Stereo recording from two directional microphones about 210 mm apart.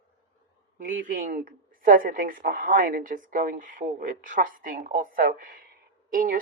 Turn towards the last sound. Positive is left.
turn(degrees=-40)  # may be behind; listen again after turning